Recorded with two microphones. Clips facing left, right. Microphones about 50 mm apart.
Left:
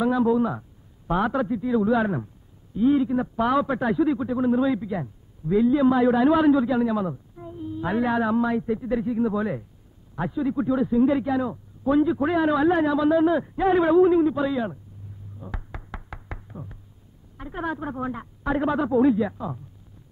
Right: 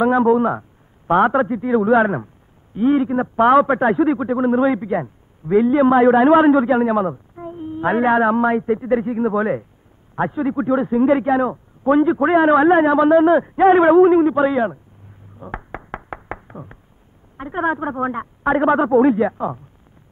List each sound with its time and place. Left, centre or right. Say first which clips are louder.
0.0 s a man's voice: right 6 dB; right
15.3 s knock: right 9 dB; right
17.4 s a man's voice: right 9 dB; right